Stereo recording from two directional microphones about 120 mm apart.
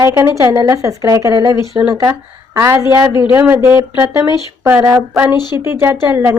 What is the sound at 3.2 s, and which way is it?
Speech, 10° right (ahead or behind).